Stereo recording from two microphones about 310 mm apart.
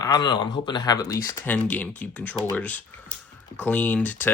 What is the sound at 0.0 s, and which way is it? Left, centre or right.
Speech, centre.